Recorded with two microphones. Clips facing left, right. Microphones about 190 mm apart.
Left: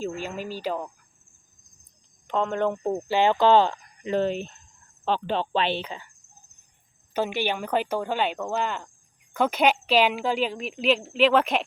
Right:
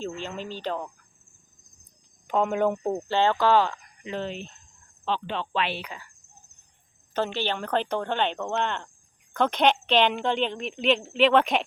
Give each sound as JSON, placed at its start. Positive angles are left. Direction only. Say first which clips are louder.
{"t": 0.0, "sound": "speech", "louder": "left 2 dB", "side_deg": 10}
{"t": 2.2, "sound": "speech", "louder": "right 1 dB", "side_deg": -5}
{"t": 2.9, "sound": "speech", "louder": "left 2 dB", "side_deg": 10}
{"t": 4.0, "sound": "speech", "louder": "left 7 dB", "side_deg": 45}
{"t": 7.1, "sound": "speech", "louder": "left 1 dB", "side_deg": 10}